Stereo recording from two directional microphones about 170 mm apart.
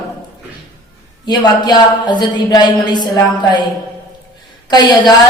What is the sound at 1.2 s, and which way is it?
A woman's voice, 25° left (ahead or behind).